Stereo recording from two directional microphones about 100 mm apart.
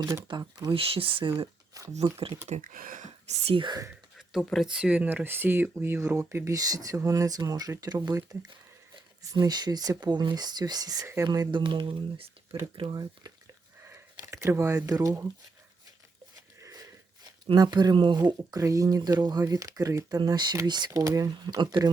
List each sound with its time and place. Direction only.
0.3 s speech: 50° right (ahead or behind)
0.8 s speech: 70° right (ahead or behind)
2.0 s speech: 75° right (ahead or behind)
3.2 s speech: 90° right
4.3 s speech: centre (ahead or behind)
4.7 s speech: 10° right (ahead or behind); by 12.5 s 65° right (ahead or behind)
12.7 s speech: 50° right (ahead or behind)
13.8 s a sound: 25° right (ahead or behind)
14.4 s speech: 25° right (ahead or behind)
16.6 s sniff: 35° right (ahead or behind)
17.5 s speech: 45° right (ahead or behind)
21.0 s speech: 35° right (ahead or behind)
21.2 s speech: 45° right (ahead or behind)